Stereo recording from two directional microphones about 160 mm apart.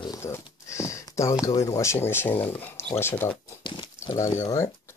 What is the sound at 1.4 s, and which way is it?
Speech, 20° left (ahead or behind).